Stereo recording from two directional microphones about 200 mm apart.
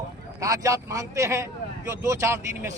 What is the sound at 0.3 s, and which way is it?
A man's voice, 15° right (ahead or behind).